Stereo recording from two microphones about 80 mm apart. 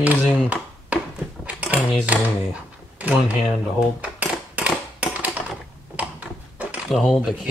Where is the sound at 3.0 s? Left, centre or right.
Centre.